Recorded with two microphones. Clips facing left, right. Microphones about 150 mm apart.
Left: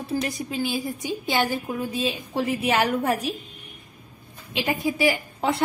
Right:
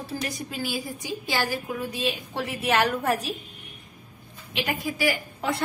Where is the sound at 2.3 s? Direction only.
10° left (ahead or behind).